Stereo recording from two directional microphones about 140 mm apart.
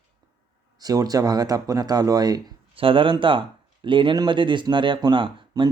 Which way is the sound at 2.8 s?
40° right (ahead or behind).